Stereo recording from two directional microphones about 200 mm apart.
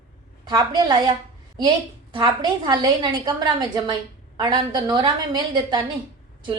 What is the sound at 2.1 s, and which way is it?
A woman's voice, 25° right (ahead or behind).